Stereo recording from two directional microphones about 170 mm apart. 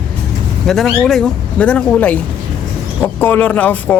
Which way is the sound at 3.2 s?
10° left (ahead or behind).